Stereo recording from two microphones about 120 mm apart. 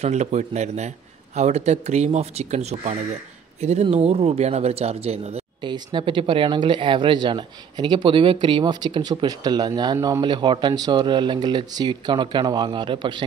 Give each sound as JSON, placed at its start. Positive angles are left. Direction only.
{"t": 0.0, "sound": "a man's voice", "side_deg": -70}
{"t": 5.6, "sound": "speech", "side_deg": -40}